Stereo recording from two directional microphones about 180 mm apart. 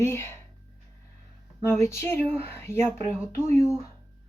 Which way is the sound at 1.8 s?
15° left (ahead or behind).